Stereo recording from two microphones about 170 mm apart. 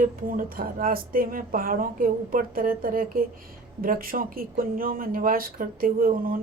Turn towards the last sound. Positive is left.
turn(degrees=-55)  # may be behind; listen again after turning